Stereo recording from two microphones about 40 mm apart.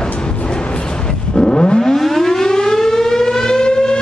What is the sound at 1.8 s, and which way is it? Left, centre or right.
Civil defense siren, centre.